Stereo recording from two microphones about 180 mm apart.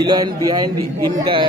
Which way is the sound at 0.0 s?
25° right (ahead or behind).